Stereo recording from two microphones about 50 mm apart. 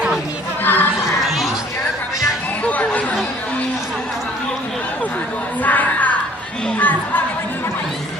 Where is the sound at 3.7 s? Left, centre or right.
Centre.